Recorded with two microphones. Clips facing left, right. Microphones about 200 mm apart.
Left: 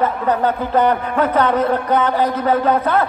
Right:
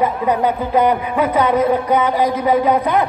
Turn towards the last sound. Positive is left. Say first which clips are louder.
# right 1 dB
turn(degrees=-15)  # may be behind; listen again after turning